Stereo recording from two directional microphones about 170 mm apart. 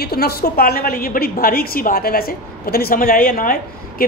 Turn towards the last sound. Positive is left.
turn(degrees=55)  # may be behind; listen again after turning